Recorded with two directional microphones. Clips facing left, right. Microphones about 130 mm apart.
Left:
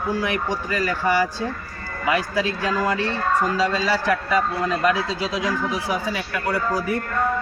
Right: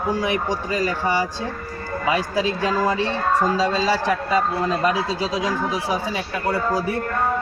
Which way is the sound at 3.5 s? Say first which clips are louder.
Right 1 dB; 30° right (ahead or behind).